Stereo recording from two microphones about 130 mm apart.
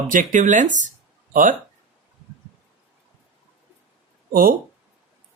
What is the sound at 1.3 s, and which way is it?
Speech, 90° right.